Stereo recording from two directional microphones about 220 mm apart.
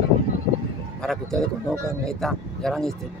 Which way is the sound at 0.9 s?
5° left (ahead or behind).